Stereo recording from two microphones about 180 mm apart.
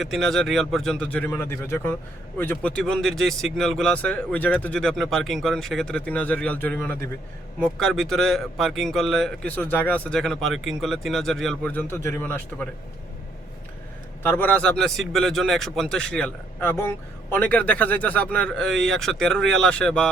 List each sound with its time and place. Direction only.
0.0 s a man's voice: centre (ahead or behind)
14.2 s a man's voice: 10° left (ahead or behind)